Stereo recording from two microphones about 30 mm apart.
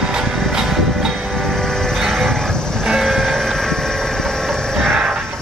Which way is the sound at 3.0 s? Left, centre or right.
Centre.